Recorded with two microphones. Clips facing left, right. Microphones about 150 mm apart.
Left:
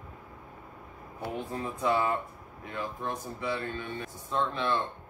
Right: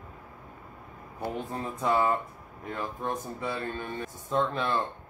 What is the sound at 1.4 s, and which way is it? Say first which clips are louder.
Speech: even; 45° right (ahead or behind).